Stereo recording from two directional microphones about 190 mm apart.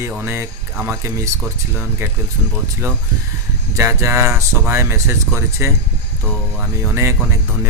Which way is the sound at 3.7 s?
15° right (ahead or behind).